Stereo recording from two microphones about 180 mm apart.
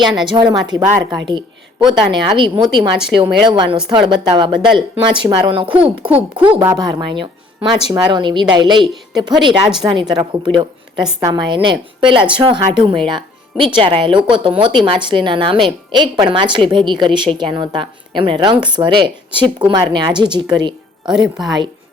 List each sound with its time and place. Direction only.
0.0 s a woman's voice: 25° right (ahead or behind)
13.1 s music: 25° right (ahead or behind)
13.7 s a woman's voice: 25° right (ahead or behind)